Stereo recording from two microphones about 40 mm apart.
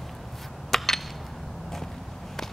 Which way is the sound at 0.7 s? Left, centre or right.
Centre.